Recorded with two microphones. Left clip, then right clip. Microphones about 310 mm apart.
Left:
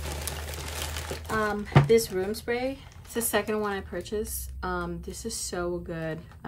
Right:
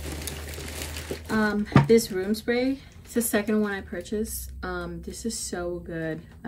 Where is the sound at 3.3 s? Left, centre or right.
Left.